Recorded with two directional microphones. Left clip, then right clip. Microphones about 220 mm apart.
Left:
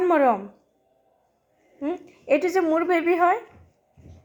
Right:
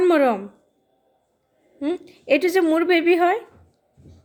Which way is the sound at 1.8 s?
20° right (ahead or behind).